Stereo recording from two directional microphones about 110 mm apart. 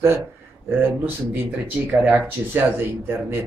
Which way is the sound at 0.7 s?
20° right (ahead or behind).